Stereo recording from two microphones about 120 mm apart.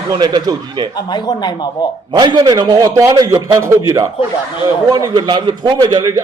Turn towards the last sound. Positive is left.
turn(degrees=-30)  # may be behind; listen again after turning